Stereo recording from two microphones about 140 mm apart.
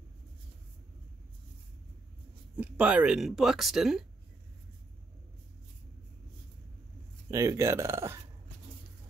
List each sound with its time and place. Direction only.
2.5 s speech: 10° right (ahead or behind)
7.2 s speech: 20° right (ahead or behind)